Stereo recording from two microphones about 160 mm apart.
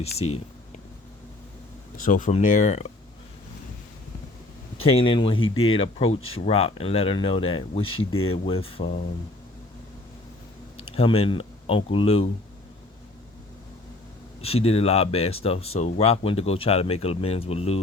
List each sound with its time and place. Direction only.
0.0 s speech: 40° left (ahead or behind)
2.0 s speech: 55° left (ahead or behind)
4.9 s speech: 35° left (ahead or behind)
10.8 s speech: 35° left (ahead or behind)
14.4 s speech: 40° left (ahead or behind)